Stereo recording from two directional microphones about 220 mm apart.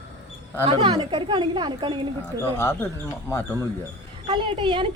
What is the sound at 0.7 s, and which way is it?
A woman's voice, 25° right (ahead or behind).